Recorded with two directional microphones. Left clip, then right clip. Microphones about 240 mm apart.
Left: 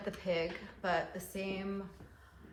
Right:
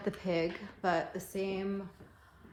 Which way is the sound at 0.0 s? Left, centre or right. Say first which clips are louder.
Right 2 dB; right.